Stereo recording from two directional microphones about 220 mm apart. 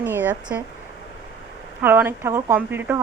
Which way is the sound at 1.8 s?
10° right (ahead or behind).